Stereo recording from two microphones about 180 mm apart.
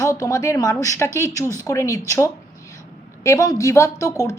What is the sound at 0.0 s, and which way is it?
A woman's voice, 15° left (ahead or behind).